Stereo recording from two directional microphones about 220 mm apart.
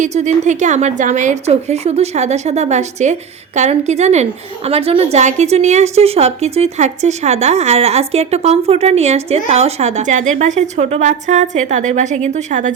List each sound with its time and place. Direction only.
0.0 s a woman's voice: 30° right (ahead or behind)